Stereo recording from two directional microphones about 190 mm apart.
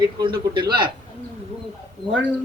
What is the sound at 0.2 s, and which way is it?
Speech, 25° right (ahead or behind).